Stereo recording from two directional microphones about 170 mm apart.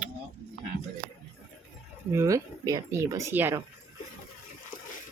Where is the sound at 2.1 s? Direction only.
20° right (ahead or behind).